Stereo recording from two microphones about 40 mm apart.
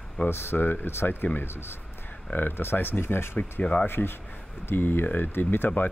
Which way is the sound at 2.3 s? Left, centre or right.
Left.